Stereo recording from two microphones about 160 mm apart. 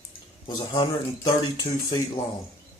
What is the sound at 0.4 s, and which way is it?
Speech, 25° left (ahead or behind).